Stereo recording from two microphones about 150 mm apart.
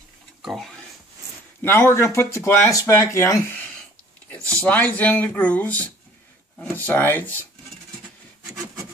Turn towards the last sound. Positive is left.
turn(degrees=15)  # may be behind; listen again after turning